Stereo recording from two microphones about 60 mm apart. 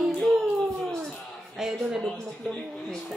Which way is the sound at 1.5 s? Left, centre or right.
Centre.